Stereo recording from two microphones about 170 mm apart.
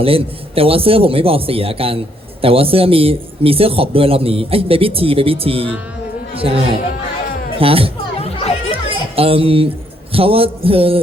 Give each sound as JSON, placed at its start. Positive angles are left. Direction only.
{"t": 0.0, "sound": "a man's voice", "side_deg": -35}
{"t": 8.7, "sound": "a sound", "side_deg": -35}
{"t": 10.1, "sound": "a man's voice", "side_deg": -35}